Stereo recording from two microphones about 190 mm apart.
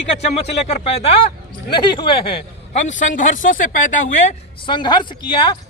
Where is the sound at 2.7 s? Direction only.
40° left (ahead or behind).